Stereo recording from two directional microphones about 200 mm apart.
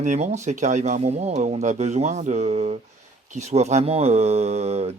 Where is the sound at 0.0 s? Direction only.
35° right (ahead or behind).